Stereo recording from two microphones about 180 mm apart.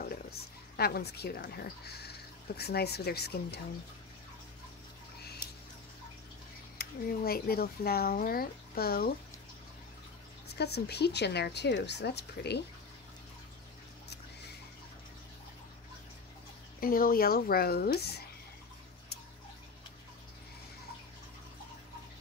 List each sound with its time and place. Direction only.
0.0 s speech: 60° left (ahead or behind)
6.8 s speech: 55° left (ahead or behind)
10.6 s speech: 65° left (ahead or behind)
16.8 s speech: 55° left (ahead or behind)